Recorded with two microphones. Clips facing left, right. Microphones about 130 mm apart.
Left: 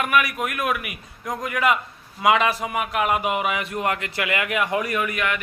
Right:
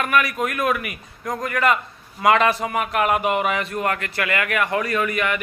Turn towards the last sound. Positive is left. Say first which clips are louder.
# right 2 dB
turn(degrees=0)  # may be behind; listen again after turning